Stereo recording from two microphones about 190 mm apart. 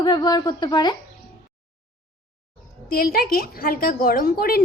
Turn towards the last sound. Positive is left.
turn(degrees=50)  # may be behind; listen again after turning